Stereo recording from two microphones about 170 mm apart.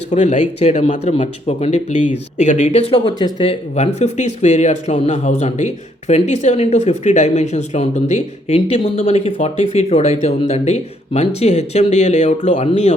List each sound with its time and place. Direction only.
0.1 s speech: 45° left (ahead or behind)